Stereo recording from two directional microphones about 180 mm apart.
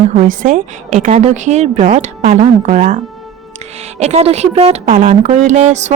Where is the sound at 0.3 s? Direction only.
45° right (ahead or behind).